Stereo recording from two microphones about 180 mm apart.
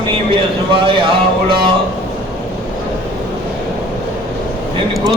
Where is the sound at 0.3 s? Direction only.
30° right (ahead or behind).